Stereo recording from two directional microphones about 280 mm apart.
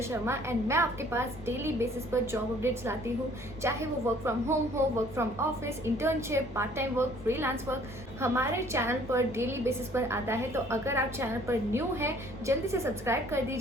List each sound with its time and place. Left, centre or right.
0.1 s a woman's voice: centre